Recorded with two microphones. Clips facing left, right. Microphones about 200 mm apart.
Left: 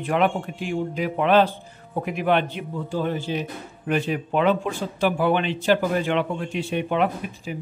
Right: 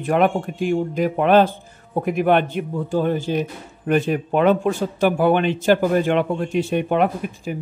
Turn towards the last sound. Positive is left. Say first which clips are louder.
# right 4 dB
turn(degrees=-50)  # may be behind; listen again after turning